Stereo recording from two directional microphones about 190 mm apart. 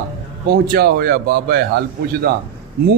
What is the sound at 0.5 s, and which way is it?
A man's voice, 55° right (ahead or behind).